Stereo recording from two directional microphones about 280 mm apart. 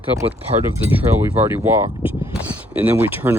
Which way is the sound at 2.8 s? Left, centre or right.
Centre.